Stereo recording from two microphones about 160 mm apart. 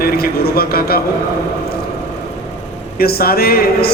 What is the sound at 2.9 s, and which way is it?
Speech, 70° left (ahead or behind).